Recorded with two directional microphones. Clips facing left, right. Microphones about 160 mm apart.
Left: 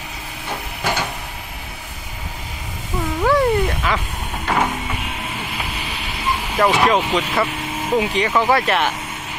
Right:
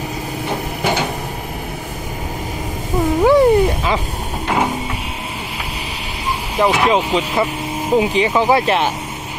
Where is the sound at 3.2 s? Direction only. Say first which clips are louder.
Right 5 dB; 20° right (ahead or behind).